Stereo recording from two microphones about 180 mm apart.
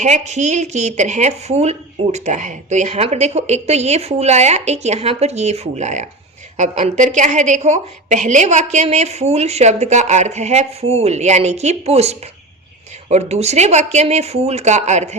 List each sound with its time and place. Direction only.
0.0 s a woman's voice: 40° right (ahead or behind)